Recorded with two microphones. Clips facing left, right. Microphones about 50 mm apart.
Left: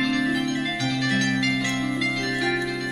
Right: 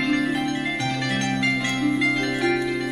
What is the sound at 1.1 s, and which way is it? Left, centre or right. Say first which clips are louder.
Music: right 1 dB; right.